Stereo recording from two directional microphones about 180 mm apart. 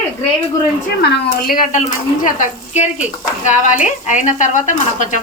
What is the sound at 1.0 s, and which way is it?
Speech, 55° left (ahead or behind).